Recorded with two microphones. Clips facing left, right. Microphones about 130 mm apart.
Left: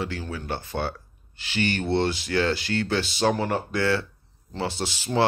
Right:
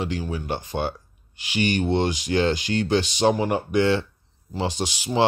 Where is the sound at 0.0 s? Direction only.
15° right (ahead or behind).